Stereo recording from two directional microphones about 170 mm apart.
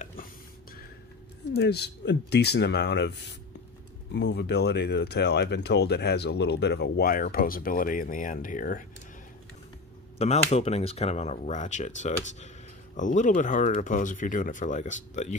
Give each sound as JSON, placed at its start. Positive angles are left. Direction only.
{"t": 1.5, "sound": "speech", "side_deg": 75}
{"t": 10.1, "sound": "speech", "side_deg": 40}